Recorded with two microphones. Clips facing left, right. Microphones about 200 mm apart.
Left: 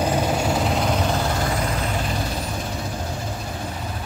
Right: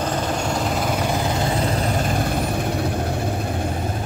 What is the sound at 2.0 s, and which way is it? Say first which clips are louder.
Vehicle: right 4 dB; 50° right (ahead or behind).